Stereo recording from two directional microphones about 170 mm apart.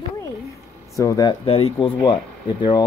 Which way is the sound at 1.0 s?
20° left (ahead or behind).